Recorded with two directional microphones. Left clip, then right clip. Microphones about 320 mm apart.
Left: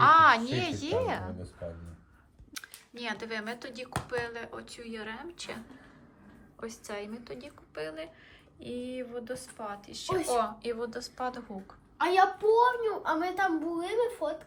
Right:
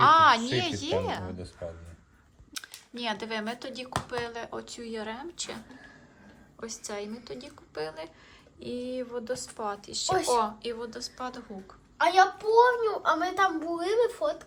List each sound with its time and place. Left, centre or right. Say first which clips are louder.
0.0 s a woman's voice: right 1 dB; centre
2.5 s speech: right 3 dB; centre
6.6 s a woman's voice: right 2 dB; centre
11.9 s a woman's voice: right 3 dB; centre